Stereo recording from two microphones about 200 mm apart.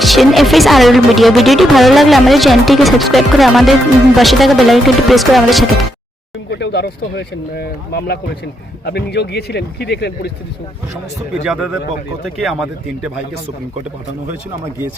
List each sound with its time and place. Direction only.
0.0 s speech: centre (ahead or behind)
6.5 s speech: 60° left (ahead or behind)
11.4 s speech: 5° right (ahead or behind)